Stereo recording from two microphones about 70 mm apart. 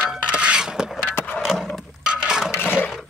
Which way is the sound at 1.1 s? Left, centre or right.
Left.